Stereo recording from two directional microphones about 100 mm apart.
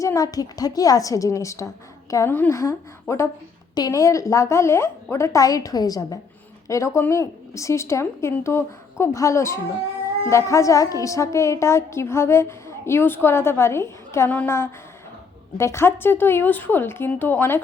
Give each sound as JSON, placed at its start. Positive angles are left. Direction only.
{"t": 0.0, "sound": "a woman's voice", "side_deg": 35}